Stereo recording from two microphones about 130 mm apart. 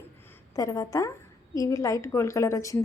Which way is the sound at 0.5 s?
25° left (ahead or behind).